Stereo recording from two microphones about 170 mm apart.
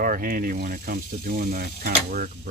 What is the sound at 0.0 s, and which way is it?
Speech, 55° right (ahead or behind).